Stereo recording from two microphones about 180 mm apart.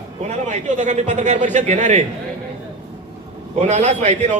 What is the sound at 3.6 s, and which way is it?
Speech, 40° right (ahead or behind).